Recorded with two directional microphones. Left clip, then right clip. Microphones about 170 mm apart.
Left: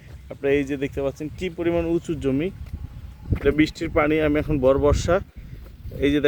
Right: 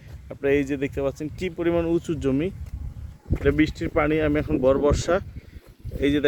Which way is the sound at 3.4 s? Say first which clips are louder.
Left 1 dB; 15° left (ahead or behind).